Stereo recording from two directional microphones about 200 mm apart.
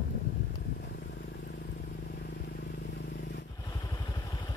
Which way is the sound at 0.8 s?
55° left (ahead or behind).